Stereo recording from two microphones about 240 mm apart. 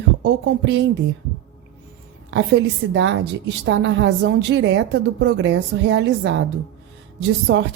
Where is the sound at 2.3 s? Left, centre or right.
Right.